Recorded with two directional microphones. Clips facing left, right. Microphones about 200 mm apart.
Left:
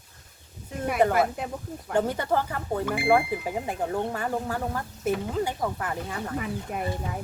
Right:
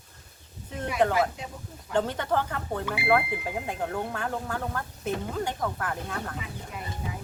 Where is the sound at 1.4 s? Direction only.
55° left (ahead or behind).